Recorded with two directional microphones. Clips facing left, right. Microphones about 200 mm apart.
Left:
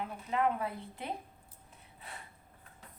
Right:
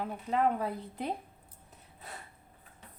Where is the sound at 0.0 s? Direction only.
40° right (ahead or behind).